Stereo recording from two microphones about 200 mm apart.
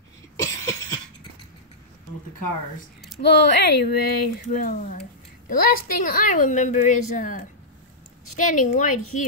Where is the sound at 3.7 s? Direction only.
50° left (ahead or behind).